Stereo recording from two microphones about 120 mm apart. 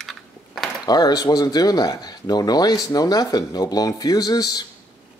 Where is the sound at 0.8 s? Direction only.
35° left (ahead or behind).